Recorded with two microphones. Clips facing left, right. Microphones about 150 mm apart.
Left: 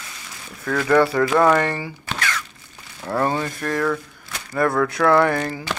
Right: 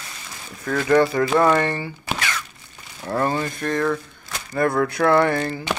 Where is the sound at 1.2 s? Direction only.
25° right (ahead or behind).